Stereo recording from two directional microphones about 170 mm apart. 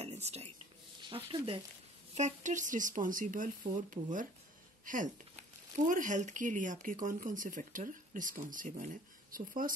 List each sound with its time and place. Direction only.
0.0 s a sound: 40° right (ahead or behind)
1.0 s speech: 30° right (ahead or behind)
2.1 s speech: 45° right (ahead or behind)